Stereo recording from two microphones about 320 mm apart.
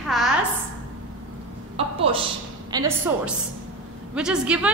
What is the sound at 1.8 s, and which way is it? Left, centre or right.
A woman's voice, centre.